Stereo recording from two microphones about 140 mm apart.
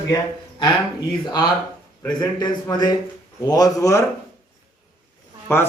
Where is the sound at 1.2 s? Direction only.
30° left (ahead or behind).